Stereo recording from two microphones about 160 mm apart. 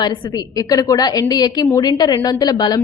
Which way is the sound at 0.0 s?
30° left (ahead or behind).